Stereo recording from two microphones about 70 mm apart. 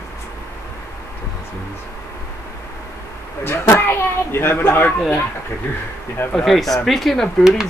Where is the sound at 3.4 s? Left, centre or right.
Left.